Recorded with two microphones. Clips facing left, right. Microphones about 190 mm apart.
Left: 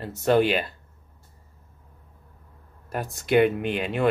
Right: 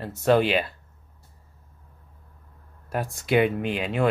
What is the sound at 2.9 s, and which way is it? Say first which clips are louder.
Speech: left 1 dB; centre (ahead or behind).